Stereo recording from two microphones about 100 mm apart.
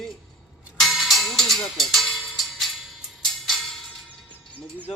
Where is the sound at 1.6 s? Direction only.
Centre (ahead or behind).